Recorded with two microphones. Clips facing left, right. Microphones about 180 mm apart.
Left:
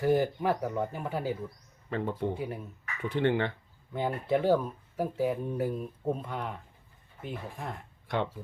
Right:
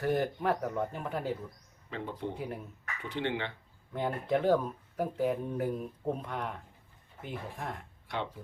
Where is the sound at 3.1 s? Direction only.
50° left (ahead or behind).